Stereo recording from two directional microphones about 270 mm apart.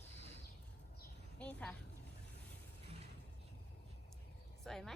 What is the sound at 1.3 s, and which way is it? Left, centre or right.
Speech, centre.